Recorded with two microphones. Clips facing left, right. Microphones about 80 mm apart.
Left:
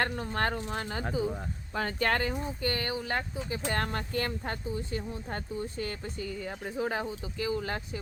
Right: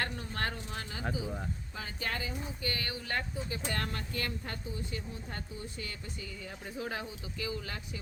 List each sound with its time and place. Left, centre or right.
0.0 s speech: left
1.7 s speech: left
2.6 s speech: left
3.7 s speech: left